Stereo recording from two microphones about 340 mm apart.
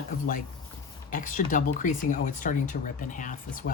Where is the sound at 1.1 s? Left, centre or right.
Left.